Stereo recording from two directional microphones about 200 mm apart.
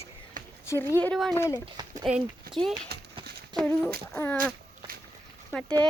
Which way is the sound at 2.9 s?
50° right (ahead or behind).